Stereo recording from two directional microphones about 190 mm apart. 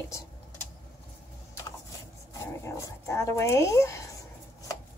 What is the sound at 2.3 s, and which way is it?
Speech, 15° left (ahead or behind).